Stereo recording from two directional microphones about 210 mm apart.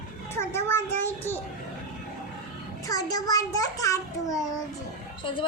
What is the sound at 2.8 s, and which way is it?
A child's voice, 15° left (ahead or behind).